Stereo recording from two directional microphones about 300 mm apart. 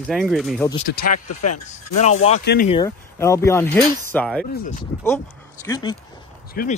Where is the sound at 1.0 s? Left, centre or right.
Left.